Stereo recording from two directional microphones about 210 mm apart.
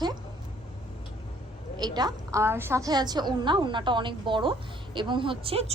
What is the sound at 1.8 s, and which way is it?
A woman's voice, 20° right (ahead or behind).